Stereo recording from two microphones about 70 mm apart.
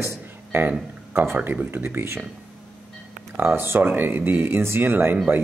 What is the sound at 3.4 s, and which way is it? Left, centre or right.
Speech, right.